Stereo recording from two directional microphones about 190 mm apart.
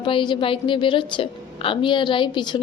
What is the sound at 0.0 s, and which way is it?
A woman's voice, 25° left (ahead or behind).